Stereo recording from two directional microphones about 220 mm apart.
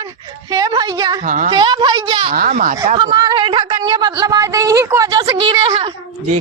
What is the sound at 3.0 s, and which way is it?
A woman's voice, 20° right (ahead or behind).